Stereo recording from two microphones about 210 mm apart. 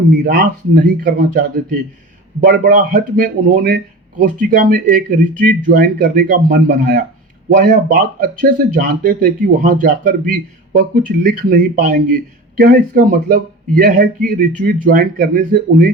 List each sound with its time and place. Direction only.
0.2 s speech: 40° right (ahead or behind)
2.4 s speech: 45° right (ahead or behind)